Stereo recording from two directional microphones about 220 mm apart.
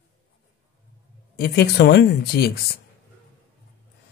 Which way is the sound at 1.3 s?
45° left (ahead or behind).